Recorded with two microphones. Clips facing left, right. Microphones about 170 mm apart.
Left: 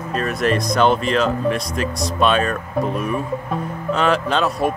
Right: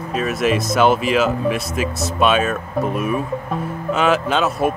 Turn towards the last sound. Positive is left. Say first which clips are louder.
# right 1 dB
turn(degrees=-5)  # may be behind; listen again after turning